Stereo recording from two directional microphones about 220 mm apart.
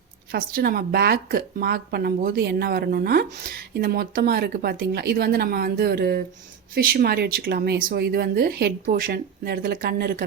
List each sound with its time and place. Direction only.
0.3 s a woman's voice: 45° right (ahead or behind)